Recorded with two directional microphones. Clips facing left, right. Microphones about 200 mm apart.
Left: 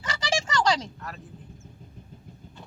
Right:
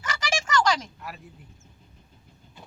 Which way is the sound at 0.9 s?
10° right (ahead or behind).